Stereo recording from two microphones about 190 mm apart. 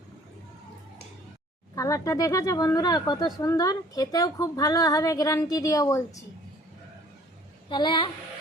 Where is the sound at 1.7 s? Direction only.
15° left (ahead or behind).